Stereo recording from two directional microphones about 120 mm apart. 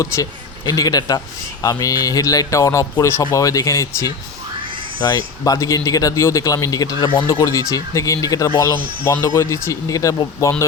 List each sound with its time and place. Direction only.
0.0 s speech: 30° left (ahead or behind)